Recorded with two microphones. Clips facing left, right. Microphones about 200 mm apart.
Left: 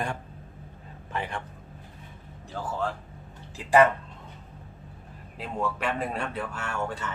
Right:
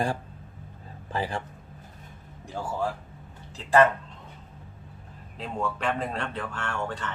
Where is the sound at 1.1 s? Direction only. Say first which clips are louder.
Right 3 dB; 30° right (ahead or behind).